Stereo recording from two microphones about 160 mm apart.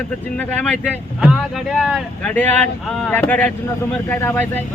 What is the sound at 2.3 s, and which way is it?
Speech, 10° left (ahead or behind).